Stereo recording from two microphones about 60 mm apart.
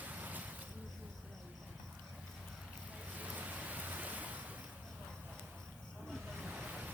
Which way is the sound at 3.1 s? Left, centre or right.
Right.